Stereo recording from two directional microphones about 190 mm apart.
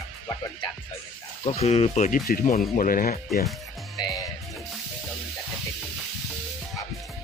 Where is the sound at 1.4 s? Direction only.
30° left (ahead or behind); by 3.2 s 45° left (ahead or behind).